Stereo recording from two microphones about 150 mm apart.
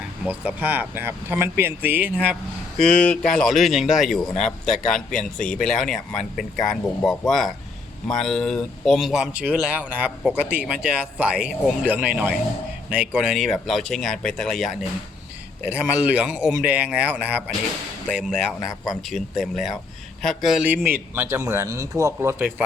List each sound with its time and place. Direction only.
0.3 s speech: 10° right (ahead or behind)
2.3 s speech: 5° left (ahead or behind)
15.7 s speech: 10° right (ahead or behind)
21.2 s speech: 15° right (ahead or behind)
22.4 s speech: 5° right (ahead or behind)